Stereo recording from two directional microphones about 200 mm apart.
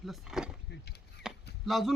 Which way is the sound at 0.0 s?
Centre (ahead or behind).